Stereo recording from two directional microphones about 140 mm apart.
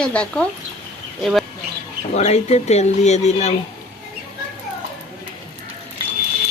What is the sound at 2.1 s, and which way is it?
Speech, 50° left (ahead or behind).